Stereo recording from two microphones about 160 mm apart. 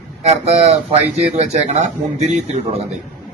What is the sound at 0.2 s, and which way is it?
Speech, 45° right (ahead or behind).